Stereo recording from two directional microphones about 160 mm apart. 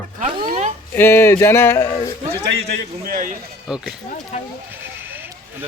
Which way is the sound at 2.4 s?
90° right.